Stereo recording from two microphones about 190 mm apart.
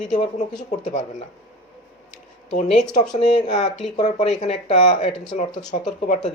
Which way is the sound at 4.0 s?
30° left (ahead or behind).